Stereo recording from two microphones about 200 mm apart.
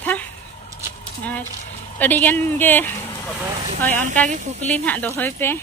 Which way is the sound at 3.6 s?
35° right (ahead or behind).